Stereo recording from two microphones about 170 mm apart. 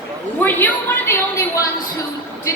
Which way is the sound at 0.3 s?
10° left (ahead or behind).